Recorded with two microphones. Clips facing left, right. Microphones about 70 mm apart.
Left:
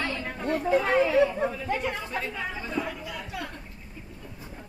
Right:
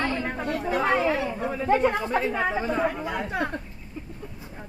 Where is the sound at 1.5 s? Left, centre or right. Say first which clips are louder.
Right 7 dB; right.